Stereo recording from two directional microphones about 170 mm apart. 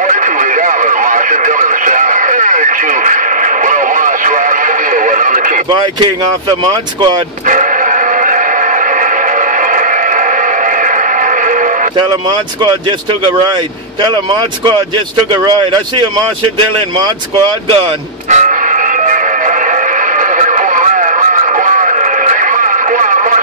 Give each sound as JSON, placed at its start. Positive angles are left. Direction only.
{"t": 0.1, "sound": "radio", "side_deg": -50}
{"t": 7.4, "sound": "music", "side_deg": -50}
{"t": 9.7, "sound": "a sound", "side_deg": -50}
{"t": 15.4, "sound": "speech", "side_deg": -25}
{"t": 18.3, "sound": "music", "side_deg": -45}
{"t": 20.2, "sound": "radio", "side_deg": -50}